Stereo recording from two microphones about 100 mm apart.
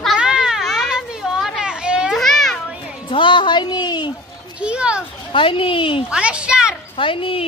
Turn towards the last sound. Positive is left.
turn(degrees=65)  # may be behind; listen again after turning